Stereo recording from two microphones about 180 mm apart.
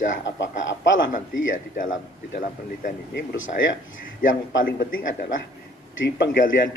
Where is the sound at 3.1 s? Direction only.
90° left.